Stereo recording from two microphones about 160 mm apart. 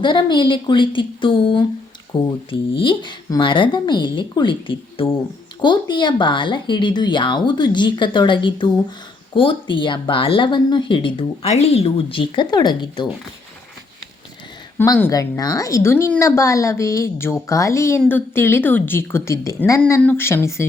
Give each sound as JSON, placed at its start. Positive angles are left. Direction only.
{"t": 0.0, "sound": "a woman's voice", "side_deg": 30}
{"t": 14.8, "sound": "a woman's voice", "side_deg": 15}